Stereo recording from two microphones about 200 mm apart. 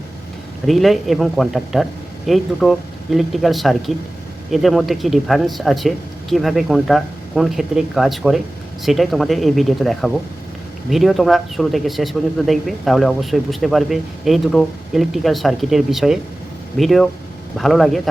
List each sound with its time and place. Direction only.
0.7 s speech: centre (ahead or behind)